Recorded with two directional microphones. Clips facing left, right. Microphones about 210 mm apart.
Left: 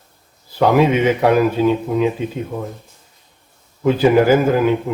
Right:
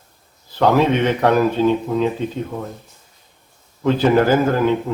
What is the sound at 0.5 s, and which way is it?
Speech, 10° left (ahead or behind).